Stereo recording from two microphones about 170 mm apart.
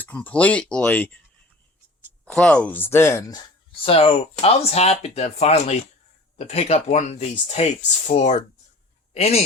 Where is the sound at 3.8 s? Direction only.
35° left (ahead or behind).